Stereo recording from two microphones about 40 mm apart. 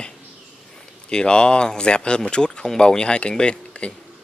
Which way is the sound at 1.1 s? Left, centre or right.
Left.